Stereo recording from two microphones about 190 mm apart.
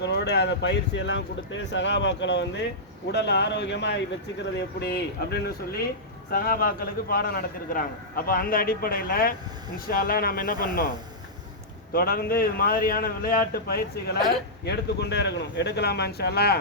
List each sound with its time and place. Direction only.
0.0 s a man's voice: 65° left (ahead or behind)
11.9 s a man's voice: 50° left (ahead or behind)